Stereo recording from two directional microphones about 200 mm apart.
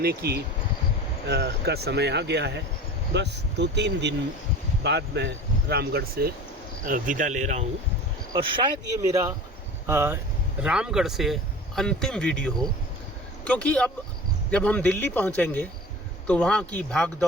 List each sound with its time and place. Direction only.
0.0 s speech: 50° right (ahead or behind)
6.8 s speech: 40° right (ahead or behind)
8.3 s speech: 25° right (ahead or behind); by 17.1 s 5° left (ahead or behind)